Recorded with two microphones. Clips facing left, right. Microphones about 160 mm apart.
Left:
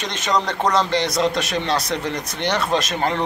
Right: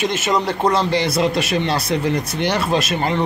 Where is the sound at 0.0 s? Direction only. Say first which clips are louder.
Right 3 dB; 5° right (ahead or behind).